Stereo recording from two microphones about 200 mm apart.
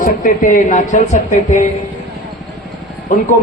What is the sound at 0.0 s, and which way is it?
Speech, 40° left (ahead or behind).